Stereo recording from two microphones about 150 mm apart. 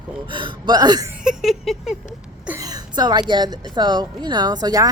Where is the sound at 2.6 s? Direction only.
25° right (ahead or behind).